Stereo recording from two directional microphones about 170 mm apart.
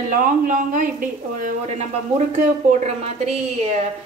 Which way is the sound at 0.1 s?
50° right (ahead or behind).